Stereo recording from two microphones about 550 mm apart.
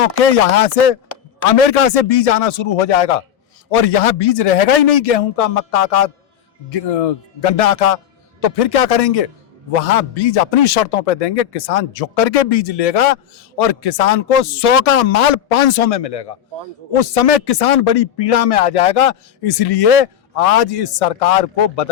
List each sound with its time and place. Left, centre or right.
0.3 s a man's voice: left